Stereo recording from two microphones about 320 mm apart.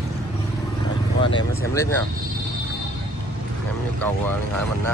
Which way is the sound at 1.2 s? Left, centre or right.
Centre.